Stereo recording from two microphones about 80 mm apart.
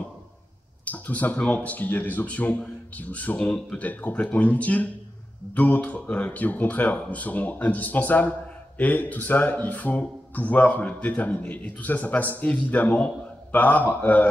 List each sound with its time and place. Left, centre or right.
0.8 s speech: centre